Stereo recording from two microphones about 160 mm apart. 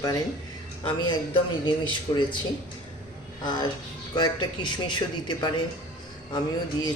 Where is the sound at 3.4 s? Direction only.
25° left (ahead or behind).